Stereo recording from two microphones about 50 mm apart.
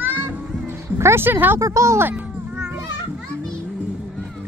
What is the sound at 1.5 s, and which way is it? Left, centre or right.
Speech, right.